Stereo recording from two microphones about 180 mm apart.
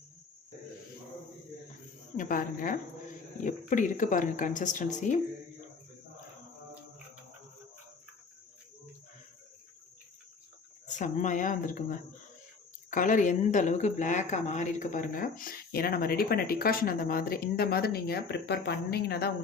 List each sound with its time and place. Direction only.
2.1 s speech: 50° left (ahead or behind)
10.8 s speech: 45° left (ahead or behind); by 19.3 s 60° left (ahead or behind)